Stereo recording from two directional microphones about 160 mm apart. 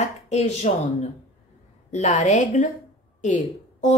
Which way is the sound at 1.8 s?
45° left (ahead or behind).